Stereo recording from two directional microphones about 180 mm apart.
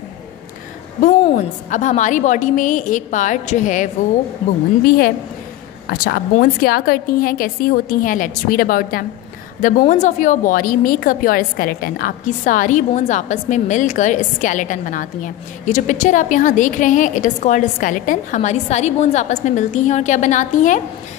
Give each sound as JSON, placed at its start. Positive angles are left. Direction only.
{"t": 1.3, "sound": "a woman's voice", "side_deg": 45}
{"t": 4.8, "sound": "a woman's voice", "side_deg": 55}